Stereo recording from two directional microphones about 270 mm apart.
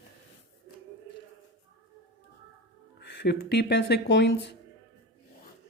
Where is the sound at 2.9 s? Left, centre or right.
Left.